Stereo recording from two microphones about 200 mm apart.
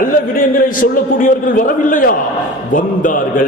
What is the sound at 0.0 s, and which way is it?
A man's voice, 45° left (ahead or behind).